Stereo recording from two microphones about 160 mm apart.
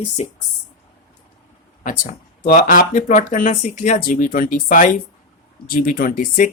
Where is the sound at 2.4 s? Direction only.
55° left (ahead or behind).